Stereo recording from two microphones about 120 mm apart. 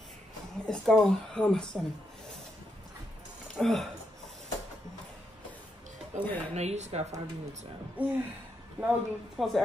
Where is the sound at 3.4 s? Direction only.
Centre (ahead or behind).